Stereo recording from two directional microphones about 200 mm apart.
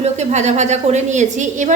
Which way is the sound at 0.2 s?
35° right (ahead or behind).